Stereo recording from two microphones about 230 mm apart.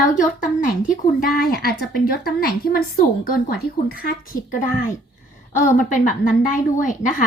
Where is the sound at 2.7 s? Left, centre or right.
Left.